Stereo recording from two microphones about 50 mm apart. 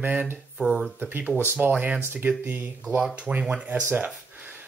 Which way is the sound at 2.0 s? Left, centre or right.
Right.